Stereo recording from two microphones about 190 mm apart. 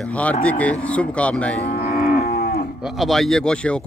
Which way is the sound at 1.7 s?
55° left (ahead or behind).